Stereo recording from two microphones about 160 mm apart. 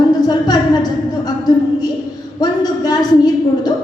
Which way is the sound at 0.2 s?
25° left (ahead or behind).